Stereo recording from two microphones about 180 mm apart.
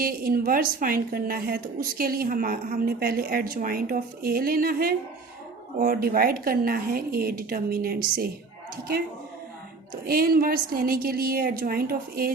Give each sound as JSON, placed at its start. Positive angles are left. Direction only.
{"t": 0.0, "sound": "a woman's voice", "side_deg": -55}
{"t": 10.1, "sound": "a woman's voice", "side_deg": -55}